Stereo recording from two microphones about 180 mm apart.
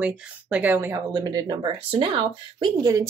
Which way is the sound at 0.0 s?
5° right (ahead or behind).